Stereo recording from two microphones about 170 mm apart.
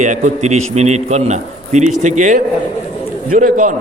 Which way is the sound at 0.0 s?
45° right (ahead or behind).